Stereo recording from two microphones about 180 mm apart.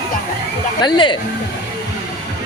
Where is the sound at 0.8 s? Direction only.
25° left (ahead or behind).